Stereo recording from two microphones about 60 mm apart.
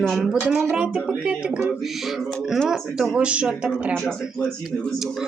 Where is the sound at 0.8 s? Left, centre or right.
Centre.